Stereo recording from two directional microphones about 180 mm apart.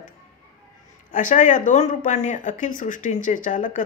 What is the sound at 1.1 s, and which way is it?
Speech, 45° left (ahead or behind).